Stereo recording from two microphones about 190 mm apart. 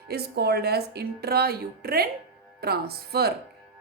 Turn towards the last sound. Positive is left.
turn(degrees=-55)  # may be behind; listen again after turning